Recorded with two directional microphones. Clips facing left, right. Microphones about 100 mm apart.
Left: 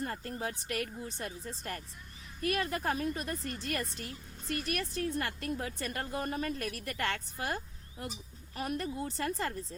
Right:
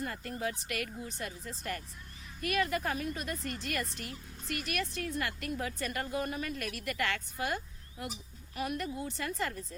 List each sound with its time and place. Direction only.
0.0 s a woman's voice: 30° left (ahead or behind)